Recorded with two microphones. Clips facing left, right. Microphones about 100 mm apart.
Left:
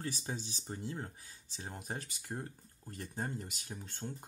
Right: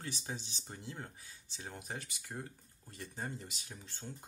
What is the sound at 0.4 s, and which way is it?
Speech, 40° left (ahead or behind).